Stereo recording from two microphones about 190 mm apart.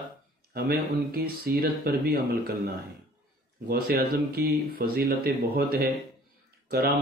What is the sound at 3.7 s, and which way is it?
Speech, 55° right (ahead or behind).